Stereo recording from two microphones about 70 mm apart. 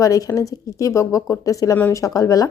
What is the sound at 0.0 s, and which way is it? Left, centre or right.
A woman's voice, left.